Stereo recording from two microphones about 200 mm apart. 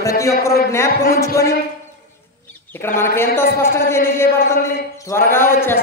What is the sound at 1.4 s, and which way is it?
Speech, 15° left (ahead or behind).